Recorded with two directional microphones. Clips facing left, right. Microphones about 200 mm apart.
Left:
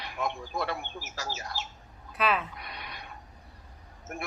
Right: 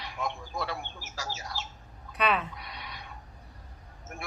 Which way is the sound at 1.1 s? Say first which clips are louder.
Even; 60° left (ahead or behind).